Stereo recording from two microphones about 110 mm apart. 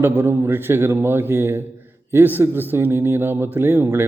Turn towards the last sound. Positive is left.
turn(degrees=-20)  # may be behind; listen again after turning